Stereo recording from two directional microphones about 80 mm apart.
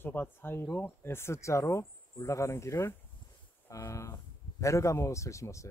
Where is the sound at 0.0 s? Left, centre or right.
Left.